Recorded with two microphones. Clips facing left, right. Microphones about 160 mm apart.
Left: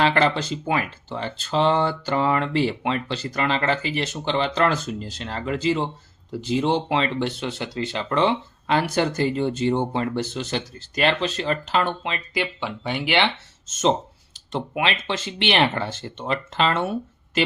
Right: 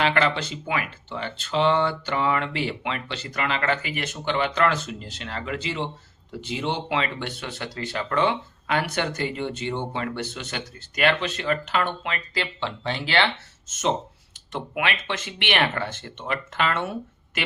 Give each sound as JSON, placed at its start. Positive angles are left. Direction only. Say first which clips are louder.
{"t": 0.0, "sound": "speech", "louder": "left 3 dB", "side_deg": 35}
{"t": 14.5, "sound": "speech", "louder": "left 3 dB", "side_deg": 30}